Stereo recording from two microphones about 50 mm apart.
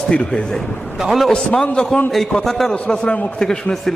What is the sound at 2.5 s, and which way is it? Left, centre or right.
Speech, centre.